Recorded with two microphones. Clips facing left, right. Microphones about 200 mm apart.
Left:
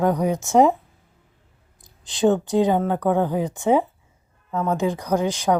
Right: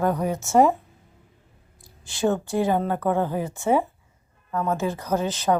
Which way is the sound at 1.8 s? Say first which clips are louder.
Left 4 dB; 20° left (ahead or behind).